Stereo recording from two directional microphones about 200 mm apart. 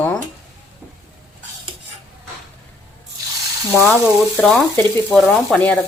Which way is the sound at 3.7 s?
Centre (ahead or behind).